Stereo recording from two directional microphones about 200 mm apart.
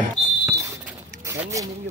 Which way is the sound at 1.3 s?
15° right (ahead or behind).